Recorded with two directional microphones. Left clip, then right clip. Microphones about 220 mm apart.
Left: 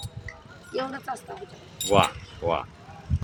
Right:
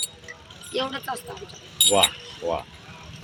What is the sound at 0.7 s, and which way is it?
Speech, 5° left (ahead or behind).